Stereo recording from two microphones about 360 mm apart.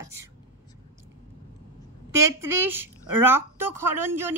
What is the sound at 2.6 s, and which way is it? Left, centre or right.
A woman's voice, centre.